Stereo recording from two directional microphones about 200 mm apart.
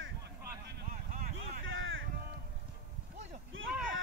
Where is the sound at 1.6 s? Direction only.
80° right.